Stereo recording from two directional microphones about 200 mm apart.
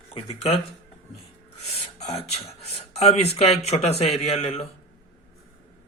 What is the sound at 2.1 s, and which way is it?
Speech, 30° left (ahead or behind).